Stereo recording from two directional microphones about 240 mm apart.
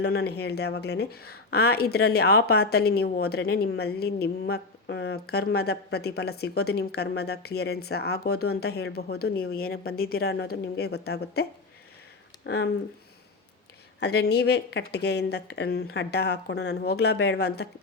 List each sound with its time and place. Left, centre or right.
0.0 s speech: left
12.5 s speech: left
14.0 s speech: left